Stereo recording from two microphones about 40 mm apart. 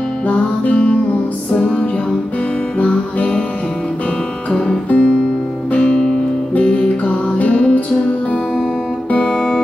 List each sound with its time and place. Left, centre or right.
0.3 s music: left
4.5 s guitar: left
4.8 s music: left
9.1 s music: left